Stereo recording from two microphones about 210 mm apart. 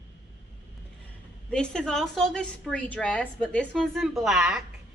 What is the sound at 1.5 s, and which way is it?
A woman's voice, 5° left (ahead or behind).